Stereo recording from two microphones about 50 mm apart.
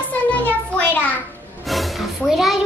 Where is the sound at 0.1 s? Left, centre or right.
Left.